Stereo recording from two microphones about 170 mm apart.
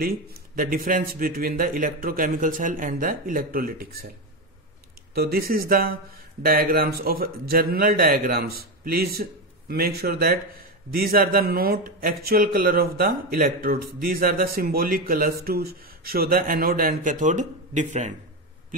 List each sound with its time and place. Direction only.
0.0 s speech: 60° right (ahead or behind)
5.1 s speech: 65° right (ahead or behind); by 18.1 s 45° right (ahead or behind)